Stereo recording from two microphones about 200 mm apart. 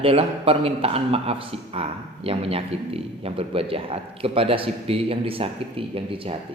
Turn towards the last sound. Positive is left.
turn(degrees=-25)  # may be behind; listen again after turning